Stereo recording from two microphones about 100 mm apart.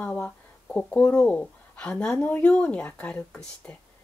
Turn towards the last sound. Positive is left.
turn(degrees=15)  # may be behind; listen again after turning